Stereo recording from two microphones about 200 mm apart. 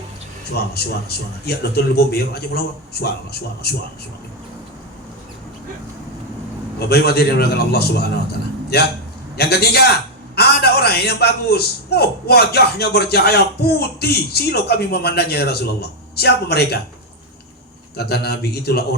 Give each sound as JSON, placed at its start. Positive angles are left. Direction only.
{"t": 0.5, "sound": "a man's voice", "side_deg": 50}
{"t": 6.7, "sound": "a man's voice", "side_deg": 55}
{"t": 17.9, "sound": "a man's voice", "side_deg": 55}